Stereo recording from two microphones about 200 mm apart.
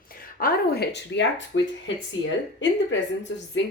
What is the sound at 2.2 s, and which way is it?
Speech, 25° left (ahead or behind).